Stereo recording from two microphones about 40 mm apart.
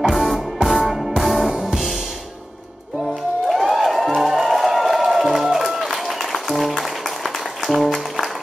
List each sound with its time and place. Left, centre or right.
0.1 s music: centre
1.5 s music: centre
3.4 s music: centre